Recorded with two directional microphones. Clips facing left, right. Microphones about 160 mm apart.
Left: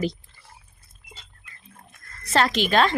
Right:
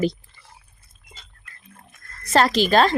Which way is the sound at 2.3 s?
40° right (ahead or behind).